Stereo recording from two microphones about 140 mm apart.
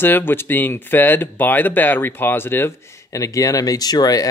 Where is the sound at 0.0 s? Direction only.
15° left (ahead or behind).